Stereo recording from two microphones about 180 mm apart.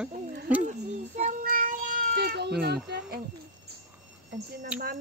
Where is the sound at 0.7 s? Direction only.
40° right (ahead or behind); by 2.5 s 65° right (ahead or behind).